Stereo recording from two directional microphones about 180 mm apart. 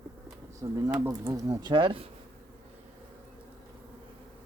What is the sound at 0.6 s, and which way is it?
Speech, 20° right (ahead or behind).